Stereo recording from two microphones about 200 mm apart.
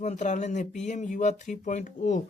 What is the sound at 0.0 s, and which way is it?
Speech, 35° left (ahead or behind).